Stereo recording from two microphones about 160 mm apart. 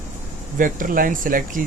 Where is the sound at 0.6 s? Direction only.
60° right (ahead or behind).